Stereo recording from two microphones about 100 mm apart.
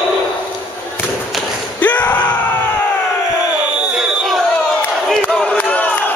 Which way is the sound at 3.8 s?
5° right (ahead or behind).